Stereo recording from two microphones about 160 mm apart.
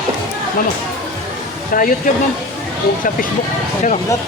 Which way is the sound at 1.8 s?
60° left (ahead or behind).